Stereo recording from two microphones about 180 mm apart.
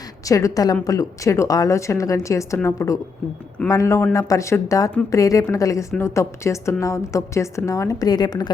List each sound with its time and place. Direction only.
0.3 s a woman's voice: 20° left (ahead or behind)